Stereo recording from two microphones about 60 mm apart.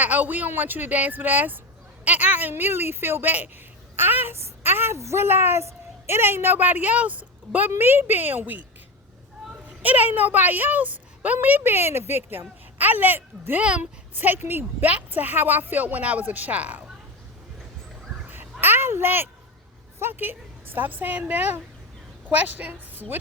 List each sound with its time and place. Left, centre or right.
0.0 s a woman's voice: right
4.9 s a woman's voice: right
7.7 s a woman's voice: right
9.8 s a woman's voice: right
13.6 s speech: centre
14.2 s a woman's voice: right
18.6 s a woman's voice: right